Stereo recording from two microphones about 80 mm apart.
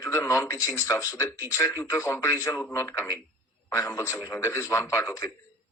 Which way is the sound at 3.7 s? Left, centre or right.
Left.